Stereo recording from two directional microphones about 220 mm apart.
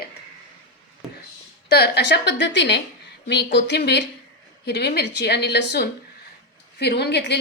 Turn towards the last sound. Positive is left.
turn(degrees=50)  # may be behind; listen again after turning